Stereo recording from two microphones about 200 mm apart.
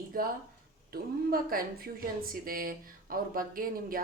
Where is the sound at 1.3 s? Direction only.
45° right (ahead or behind).